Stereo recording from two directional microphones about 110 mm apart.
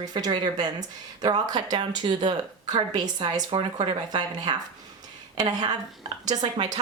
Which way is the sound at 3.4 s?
50° right (ahead or behind).